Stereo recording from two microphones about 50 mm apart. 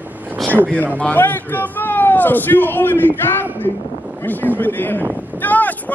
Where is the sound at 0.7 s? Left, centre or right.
Left.